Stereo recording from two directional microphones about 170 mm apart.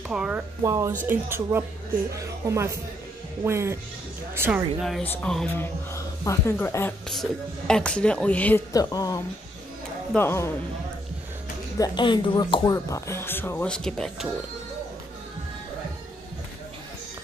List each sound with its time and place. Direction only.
0.1 s speech: 5° right (ahead or behind)
0.7 s a woman's voice: 20° right (ahead or behind); by 5.5 s 5° left (ahead or behind)
5.6 s speech: 15° left (ahead or behind)
7.1 s speech: 5° left (ahead or behind)
8.7 s speech: 20° left (ahead or behind)
11.8 s speech: 25° left (ahead or behind); by 14.2 s 5° left (ahead or behind)